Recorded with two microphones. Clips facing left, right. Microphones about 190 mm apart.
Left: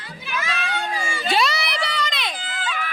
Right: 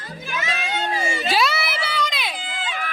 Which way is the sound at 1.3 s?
Centre (ahead or behind).